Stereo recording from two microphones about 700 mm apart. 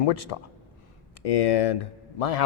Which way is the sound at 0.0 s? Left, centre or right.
Left.